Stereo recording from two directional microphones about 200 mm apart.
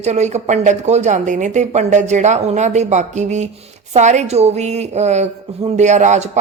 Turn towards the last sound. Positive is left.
turn(degrees=-35)  # may be behind; listen again after turning